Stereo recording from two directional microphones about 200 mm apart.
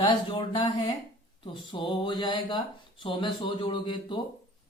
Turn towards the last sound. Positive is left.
turn(degrees=25)  # may be behind; listen again after turning